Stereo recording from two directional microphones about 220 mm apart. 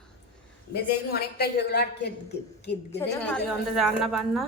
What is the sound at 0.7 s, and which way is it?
A woman's voice, 45° left (ahead or behind).